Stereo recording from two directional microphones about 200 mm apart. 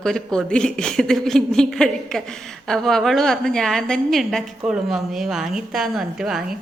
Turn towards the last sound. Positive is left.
turn(degrees=-5)  # may be behind; listen again after turning